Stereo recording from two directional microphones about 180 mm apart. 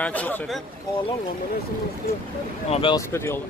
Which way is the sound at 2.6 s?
35° left (ahead or behind).